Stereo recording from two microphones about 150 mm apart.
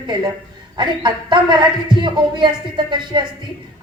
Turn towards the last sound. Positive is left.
turn(degrees=-30)  # may be behind; listen again after turning